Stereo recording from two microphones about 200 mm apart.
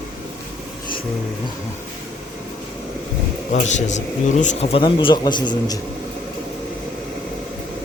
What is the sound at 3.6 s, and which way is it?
Speech, 35° left (ahead or behind).